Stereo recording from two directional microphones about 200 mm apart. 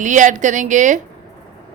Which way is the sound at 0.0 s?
40° right (ahead or behind).